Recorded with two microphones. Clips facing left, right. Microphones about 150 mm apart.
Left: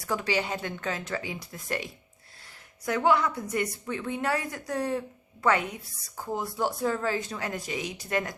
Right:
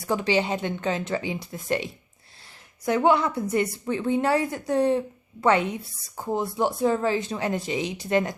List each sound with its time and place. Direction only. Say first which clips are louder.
0.0 s a woman's voice: right 5 dB; 25° right (ahead or behind)